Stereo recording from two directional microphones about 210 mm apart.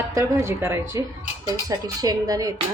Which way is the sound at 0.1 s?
15° right (ahead or behind).